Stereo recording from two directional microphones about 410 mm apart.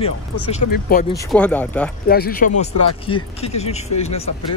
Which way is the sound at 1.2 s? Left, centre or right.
Centre.